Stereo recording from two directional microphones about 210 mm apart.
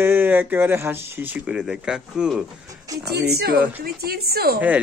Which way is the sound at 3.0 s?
50° right (ahead or behind).